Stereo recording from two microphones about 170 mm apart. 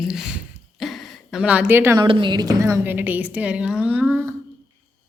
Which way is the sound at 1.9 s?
30° right (ahead or behind).